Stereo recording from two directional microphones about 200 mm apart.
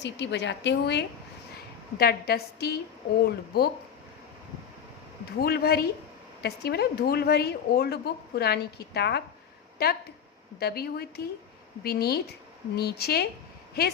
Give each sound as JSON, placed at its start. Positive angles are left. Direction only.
{"t": 0.0, "sound": "a woman's voice", "side_deg": 60}
{"t": 5.4, "sound": "a woman's voice", "side_deg": 50}